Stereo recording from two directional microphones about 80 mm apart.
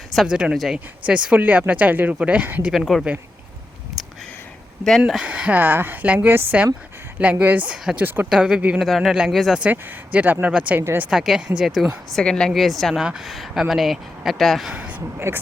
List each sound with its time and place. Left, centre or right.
0.3 s speech: centre
1.0 s speech: centre
2.7 s speech: centre
4.0 s a sound: centre
4.8 s speech: centre
5.2 s speech: centre
8.3 s speech: centre
8.8 s speech: centre
9.7 s speech: right
11.1 s speech: centre
12.1 s speech: centre
14.7 s a sound: centre
15.3 s speech: right